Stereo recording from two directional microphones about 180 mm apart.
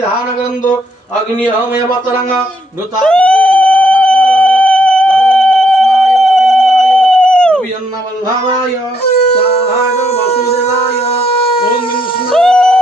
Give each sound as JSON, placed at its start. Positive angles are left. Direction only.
{"t": 3.0, "sound": "cat", "side_deg": 5}
{"t": 9.6, "sound": "music", "side_deg": 35}
{"t": 12.3, "sound": "a sound", "side_deg": 5}